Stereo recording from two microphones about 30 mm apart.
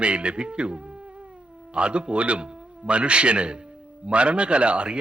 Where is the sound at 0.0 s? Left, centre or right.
Right.